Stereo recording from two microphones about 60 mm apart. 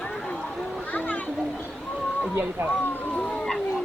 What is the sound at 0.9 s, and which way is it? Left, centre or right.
Children playing, left.